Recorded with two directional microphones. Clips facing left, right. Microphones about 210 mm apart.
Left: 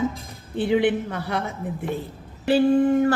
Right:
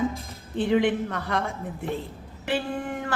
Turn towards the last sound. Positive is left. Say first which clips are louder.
# left 14 dB
turn(degrees=30)  # may be behind; listen again after turning